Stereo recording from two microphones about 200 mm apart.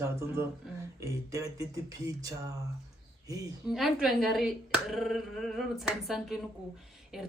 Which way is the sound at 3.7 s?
Centre (ahead or behind).